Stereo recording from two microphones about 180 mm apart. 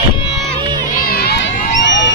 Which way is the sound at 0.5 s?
25° right (ahead or behind).